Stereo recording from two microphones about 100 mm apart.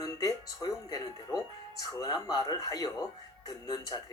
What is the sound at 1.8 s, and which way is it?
Speech, 40° left (ahead or behind).